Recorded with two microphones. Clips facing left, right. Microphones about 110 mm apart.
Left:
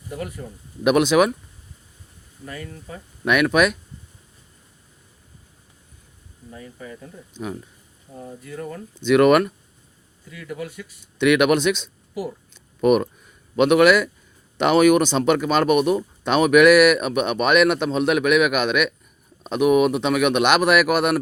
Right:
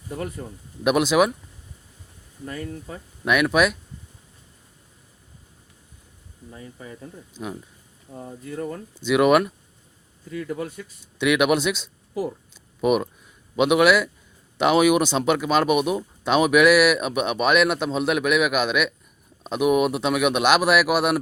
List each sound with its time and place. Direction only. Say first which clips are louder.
0.9 s speech: left 2 dB; centre (ahead or behind)
3.5 s speech: left 1 dB; centre (ahead or behind)
6.5 s speech: left 2 dB; 25° right (ahead or behind)
7.3 s speech: left 3 dB; 10° right (ahead or behind)
8.2 s speech: right 2 dB; 35° right (ahead or behind)
9.0 s speech: left 3 dB; 5° right (ahead or behind)
10.2 s speech: right 3 dB; 35° right (ahead or behind)
11.2 s speech: left 3 dB; 5° right (ahead or behind)